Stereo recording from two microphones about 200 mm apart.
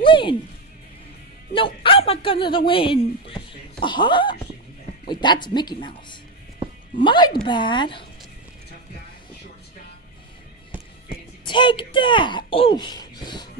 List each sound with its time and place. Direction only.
0.0 s music: 25° left (ahead or behind)
1.5 s speech: 25° left (ahead or behind)
11.4 s speech: 25° left (ahead or behind)